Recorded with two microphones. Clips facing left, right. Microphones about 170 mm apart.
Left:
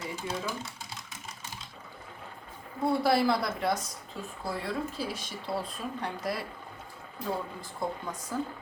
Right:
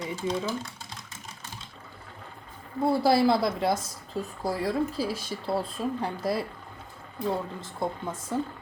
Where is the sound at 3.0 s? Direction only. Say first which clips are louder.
Right 5 dB; 30° right (ahead or behind).